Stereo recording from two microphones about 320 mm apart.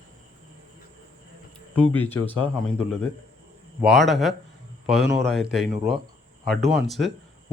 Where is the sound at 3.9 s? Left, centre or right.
Centre.